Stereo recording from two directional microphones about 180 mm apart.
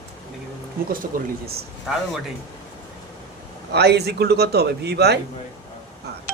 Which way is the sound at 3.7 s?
65° right (ahead or behind).